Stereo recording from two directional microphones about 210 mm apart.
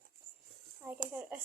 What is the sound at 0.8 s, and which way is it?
Speech, 10° right (ahead or behind).